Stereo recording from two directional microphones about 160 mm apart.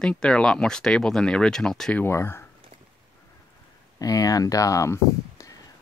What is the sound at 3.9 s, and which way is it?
Speech, 20° left (ahead or behind).